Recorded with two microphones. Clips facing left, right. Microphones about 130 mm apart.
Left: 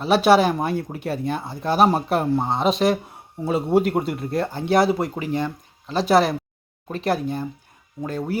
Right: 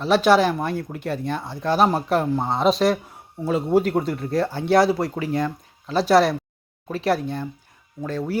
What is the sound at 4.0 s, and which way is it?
Speech, 20° left (ahead or behind).